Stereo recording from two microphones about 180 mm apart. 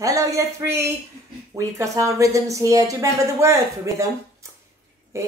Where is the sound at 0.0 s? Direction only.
20° right (ahead or behind).